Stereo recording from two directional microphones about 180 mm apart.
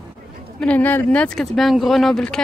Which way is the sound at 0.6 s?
10° left (ahead or behind).